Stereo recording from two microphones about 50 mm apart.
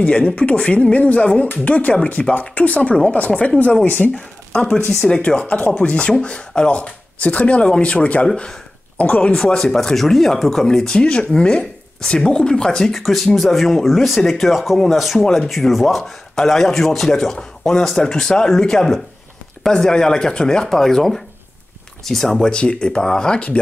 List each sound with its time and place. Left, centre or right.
0.0 s speech: left
4.5 s a sound: centre
4.8 s speech: centre
6.8 s speech: left
7.6 s speech: centre
8.4 s a sound: left
9.0 s speech: left
9.3 s speech: centre
22.4 s speech: left